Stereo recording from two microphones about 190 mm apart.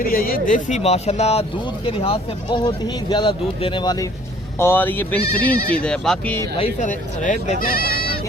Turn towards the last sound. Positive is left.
turn(degrees=50)  # may be behind; listen again after turning